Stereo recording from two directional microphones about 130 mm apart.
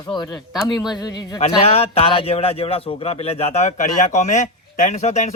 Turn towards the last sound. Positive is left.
turn(degrees=60)  # may be behind; listen again after turning